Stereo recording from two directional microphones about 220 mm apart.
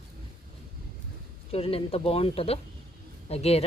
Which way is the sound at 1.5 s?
25° left (ahead or behind).